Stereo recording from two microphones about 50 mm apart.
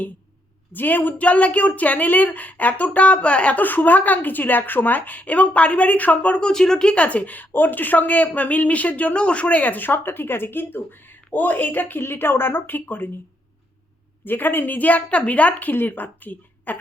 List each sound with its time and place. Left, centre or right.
0.7 s speech: left
3.6 s speech: left
6.5 s speech: centre; by 13.1 s left
14.3 s speech: left
15.7 s speech: left